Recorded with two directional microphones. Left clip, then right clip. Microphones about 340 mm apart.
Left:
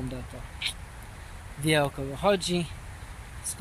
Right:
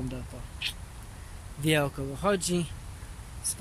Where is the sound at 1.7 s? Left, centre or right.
Centre.